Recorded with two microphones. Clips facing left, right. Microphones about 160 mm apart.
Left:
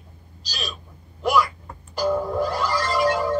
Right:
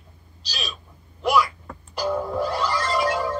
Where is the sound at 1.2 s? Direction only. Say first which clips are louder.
Even; centre (ahead or behind).